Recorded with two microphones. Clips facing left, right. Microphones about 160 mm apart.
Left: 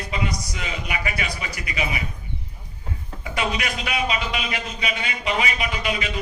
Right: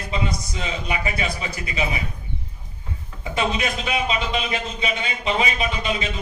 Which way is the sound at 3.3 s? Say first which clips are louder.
Right 3 dB; 25° right (ahead or behind).